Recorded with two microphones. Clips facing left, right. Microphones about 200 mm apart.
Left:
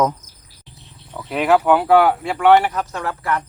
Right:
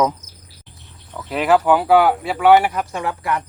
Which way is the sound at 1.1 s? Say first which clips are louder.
Even; centre (ahead or behind).